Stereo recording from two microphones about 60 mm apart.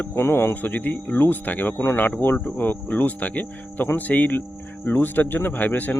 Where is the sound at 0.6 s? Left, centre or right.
Left.